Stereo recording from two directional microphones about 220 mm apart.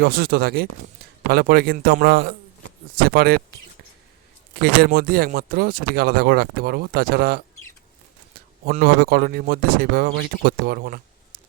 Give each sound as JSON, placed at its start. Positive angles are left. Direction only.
{"t": 0.0, "sound": "speech", "side_deg": -40}
{"t": 4.6, "sound": "speech", "side_deg": -45}
{"t": 8.6, "sound": "speech", "side_deg": -40}